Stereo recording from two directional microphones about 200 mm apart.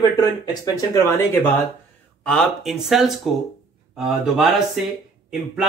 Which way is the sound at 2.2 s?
Centre (ahead or behind).